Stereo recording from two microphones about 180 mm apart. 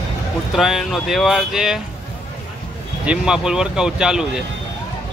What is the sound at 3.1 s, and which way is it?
Speech, 5° right (ahead or behind).